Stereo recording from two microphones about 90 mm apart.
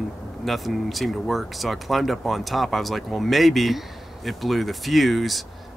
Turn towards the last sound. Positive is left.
turn(degrees=0)  # may be behind; listen again after turning